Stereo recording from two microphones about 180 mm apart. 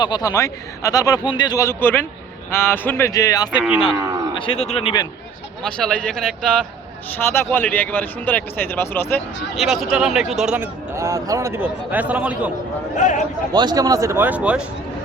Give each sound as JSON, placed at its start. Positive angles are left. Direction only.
{"t": 0.0, "sound": "speech", "side_deg": 20}
{"t": 4.4, "sound": "speech", "side_deg": 30}
{"t": 5.6, "sound": "speech", "side_deg": 5}
{"t": 9.6, "sound": "speech", "side_deg": 0}
{"t": 13.0, "sound": "a man's voice", "side_deg": 45}
{"t": 13.5, "sound": "speech", "side_deg": -25}